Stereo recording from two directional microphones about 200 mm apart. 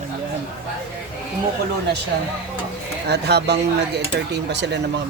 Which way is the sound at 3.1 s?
55° right (ahead or behind).